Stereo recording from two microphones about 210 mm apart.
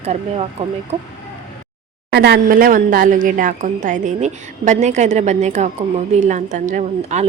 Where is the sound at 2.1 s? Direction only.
50° right (ahead or behind).